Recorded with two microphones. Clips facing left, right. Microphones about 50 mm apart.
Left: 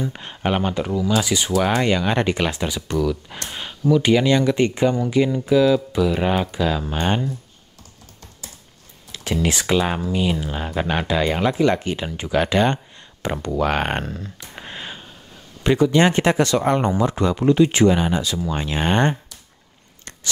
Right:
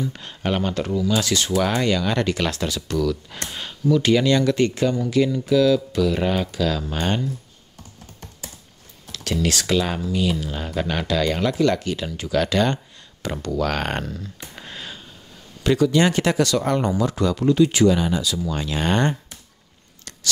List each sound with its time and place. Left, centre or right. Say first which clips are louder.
0.1 s speech: left 2 dB; left
9.1 s speech: left 1 dB; left
14.0 s speech: left 1 dB; left
14.5 s a sound: left 5 dB; left
15.6 s speech: left 2 dB; left